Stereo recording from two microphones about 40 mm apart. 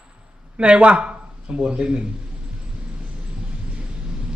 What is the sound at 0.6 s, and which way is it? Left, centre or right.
Speech, right.